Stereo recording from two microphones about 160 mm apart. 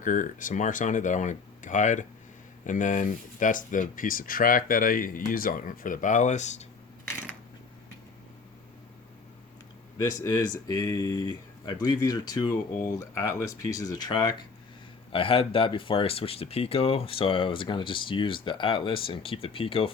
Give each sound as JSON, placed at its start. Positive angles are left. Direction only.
{"t": 0.0, "sound": "speech", "side_deg": 55}
{"t": 10.0, "sound": "speech", "side_deg": 20}